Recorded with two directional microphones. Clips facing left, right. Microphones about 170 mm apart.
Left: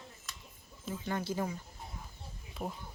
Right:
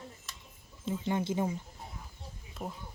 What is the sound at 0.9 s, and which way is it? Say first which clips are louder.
Speech: right 4 dB; 20° right (ahead or behind).